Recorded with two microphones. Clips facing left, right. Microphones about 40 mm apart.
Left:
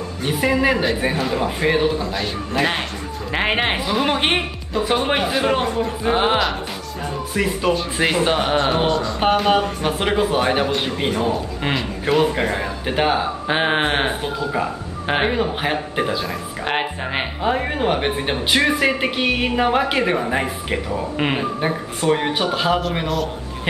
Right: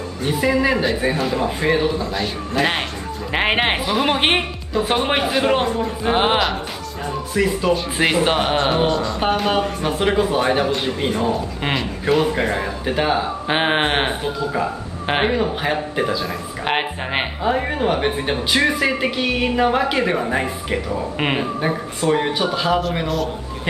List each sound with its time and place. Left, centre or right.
0.2 s speech: centre
0.8 s a man's voice: centre
3.3 s a man's voice: centre
6.1 s speech: centre
7.3 s speech: centre
7.7 s a man's voice: centre
12.8 s speech: centre
13.5 s speech: centre
14.2 s speech: centre
16.6 s speech: centre
17.4 s a man's voice: centre
21.2 s speech: centre
22.0 s speech: centre
22.8 s a man's voice: centre